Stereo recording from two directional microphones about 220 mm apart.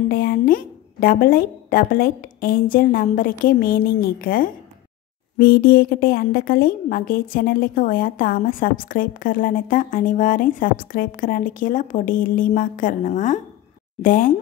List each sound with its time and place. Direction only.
0.1 s a woman's voice: 40° left (ahead or behind)